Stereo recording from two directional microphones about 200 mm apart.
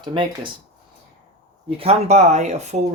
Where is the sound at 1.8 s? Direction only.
30° right (ahead or behind).